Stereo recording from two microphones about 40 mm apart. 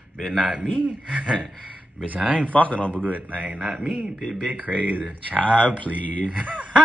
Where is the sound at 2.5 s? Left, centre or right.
Left.